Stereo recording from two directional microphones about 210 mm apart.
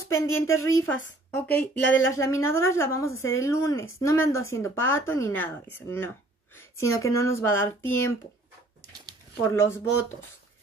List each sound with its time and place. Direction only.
0.1 s speech: 15° left (ahead or behind)
1.8 s speech: 60° left (ahead or behind)
2.0 s speech: 15° left (ahead or behind)